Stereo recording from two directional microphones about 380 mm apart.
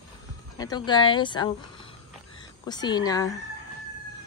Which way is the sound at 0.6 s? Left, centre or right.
Centre.